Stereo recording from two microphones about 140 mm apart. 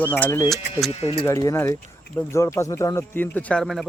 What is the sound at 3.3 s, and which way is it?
Speech, 5° left (ahead or behind).